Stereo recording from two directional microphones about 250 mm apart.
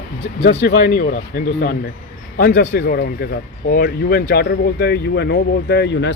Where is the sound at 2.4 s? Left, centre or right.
Left.